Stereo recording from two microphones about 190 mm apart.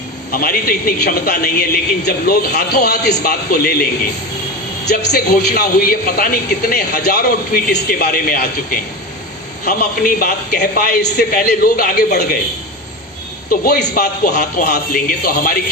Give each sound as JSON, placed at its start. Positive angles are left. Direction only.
{"t": 0.3, "sound": "a man's voice", "side_deg": 50}
{"t": 4.9, "sound": "a man's voice", "side_deg": 55}
{"t": 13.5, "sound": "a man's voice", "side_deg": 55}